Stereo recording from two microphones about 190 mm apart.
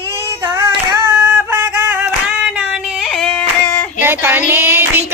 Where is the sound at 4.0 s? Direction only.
10° right (ahead or behind).